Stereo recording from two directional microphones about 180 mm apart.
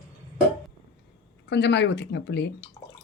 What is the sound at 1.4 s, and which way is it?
Speech, 75° left (ahead or behind).